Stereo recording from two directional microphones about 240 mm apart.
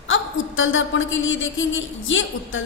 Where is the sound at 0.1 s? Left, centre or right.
Left.